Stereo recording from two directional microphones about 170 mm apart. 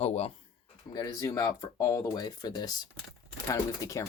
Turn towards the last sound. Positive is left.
turn(degrees=20)  # may be behind; listen again after turning